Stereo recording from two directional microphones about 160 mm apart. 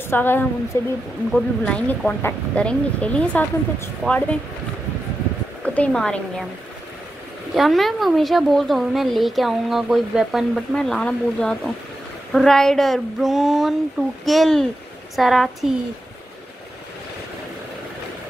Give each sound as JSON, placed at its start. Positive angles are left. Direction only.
{"t": 0.1, "sound": "speech", "side_deg": 15}
{"t": 1.3, "sound": "speech", "side_deg": 5}
{"t": 5.6, "sound": "speech", "side_deg": 5}
{"t": 7.5, "sound": "a woman's voice", "side_deg": 0}